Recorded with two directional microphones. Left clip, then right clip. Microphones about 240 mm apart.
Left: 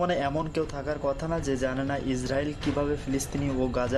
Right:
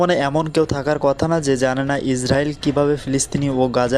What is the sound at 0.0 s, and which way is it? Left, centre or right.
Speech, right.